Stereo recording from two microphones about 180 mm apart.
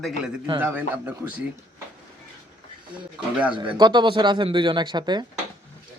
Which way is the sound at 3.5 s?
25° right (ahead or behind).